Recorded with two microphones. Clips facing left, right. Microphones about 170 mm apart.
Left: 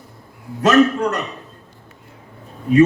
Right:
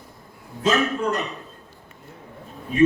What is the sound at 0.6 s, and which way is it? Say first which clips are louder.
Speech: left 8 dB; 75° left (ahead or behind).